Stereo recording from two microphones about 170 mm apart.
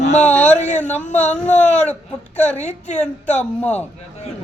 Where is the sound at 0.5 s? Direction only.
45° left (ahead or behind).